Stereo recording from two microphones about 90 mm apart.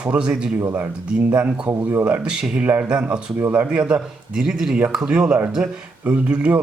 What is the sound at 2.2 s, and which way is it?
Speech, 10° right (ahead or behind).